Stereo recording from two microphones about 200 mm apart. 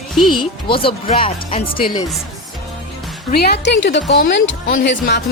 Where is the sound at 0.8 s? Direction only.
25° left (ahead or behind).